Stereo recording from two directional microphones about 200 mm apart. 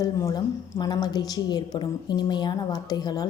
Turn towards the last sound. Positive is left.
turn(degrees=20)  # may be behind; listen again after turning